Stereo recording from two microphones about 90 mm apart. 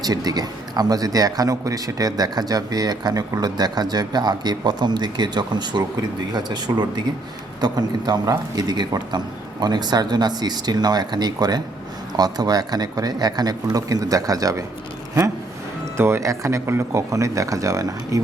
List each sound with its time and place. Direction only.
0.0 s a man's voice: 45° right (ahead or behind)
16.0 s speech: 30° right (ahead or behind)